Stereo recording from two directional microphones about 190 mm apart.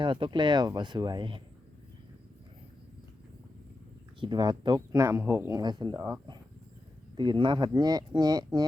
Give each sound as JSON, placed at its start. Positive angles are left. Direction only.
{"t": 0.0, "sound": "speech", "side_deg": -25}
{"t": 4.2, "sound": "speech", "side_deg": -20}